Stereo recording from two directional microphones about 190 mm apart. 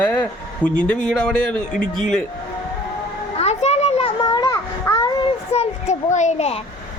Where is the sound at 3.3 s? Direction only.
35° left (ahead or behind).